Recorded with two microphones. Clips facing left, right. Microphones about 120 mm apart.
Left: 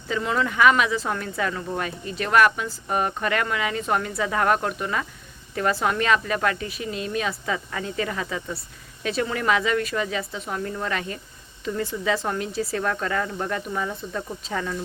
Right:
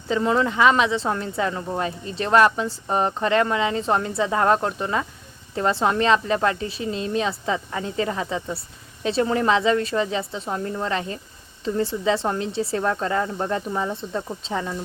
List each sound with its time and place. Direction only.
0.1 s speech: 30° right (ahead or behind)